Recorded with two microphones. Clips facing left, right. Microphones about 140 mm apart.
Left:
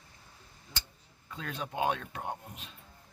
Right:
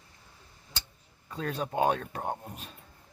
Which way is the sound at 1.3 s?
40° right (ahead or behind).